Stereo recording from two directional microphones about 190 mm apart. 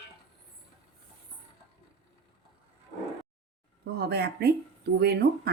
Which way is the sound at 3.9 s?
55° right (ahead or behind).